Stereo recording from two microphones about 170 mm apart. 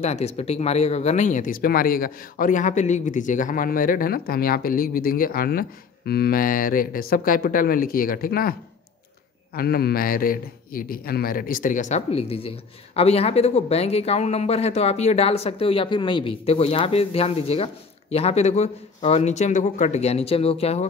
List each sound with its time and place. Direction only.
0.0 s speech: 40° left (ahead or behind); by 8.5 s 60° left (ahead or behind)
9.6 s a man's voice: 65° left (ahead or behind); by 20.8 s 35° left (ahead or behind)